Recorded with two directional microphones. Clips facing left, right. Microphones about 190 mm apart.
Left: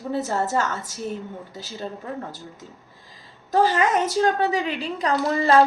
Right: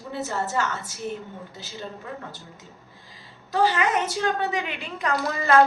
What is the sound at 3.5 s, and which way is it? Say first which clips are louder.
A woman's voice: left 3 dB; 45° left (ahead or behind).